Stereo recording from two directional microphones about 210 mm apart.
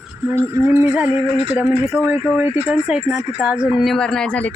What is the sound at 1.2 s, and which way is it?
Speech, 25° right (ahead or behind).